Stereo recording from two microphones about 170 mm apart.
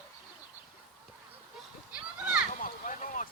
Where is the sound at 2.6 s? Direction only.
50° left (ahead or behind).